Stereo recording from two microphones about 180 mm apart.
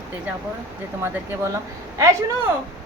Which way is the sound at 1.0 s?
15° right (ahead or behind).